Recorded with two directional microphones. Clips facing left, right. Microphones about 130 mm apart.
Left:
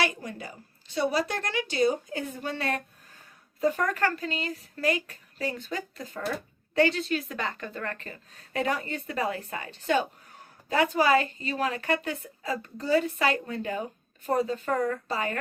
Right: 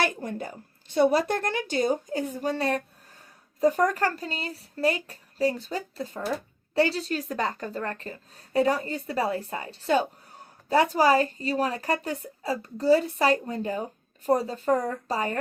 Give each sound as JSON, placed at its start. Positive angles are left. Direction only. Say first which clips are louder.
{"t": 0.0, "sound": "a woman's voice", "louder": "right 2 dB", "side_deg": -50}